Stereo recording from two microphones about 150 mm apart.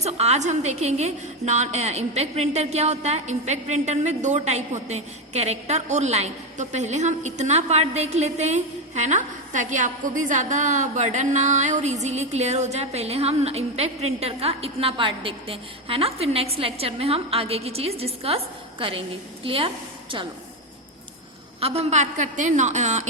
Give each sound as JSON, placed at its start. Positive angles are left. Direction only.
{"t": 0.0, "sound": "a woman's voice", "side_deg": -45}
{"t": 21.6, "sound": "a woman's voice", "side_deg": -45}